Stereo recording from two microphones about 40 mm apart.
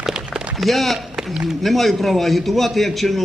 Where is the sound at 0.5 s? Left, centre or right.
Centre.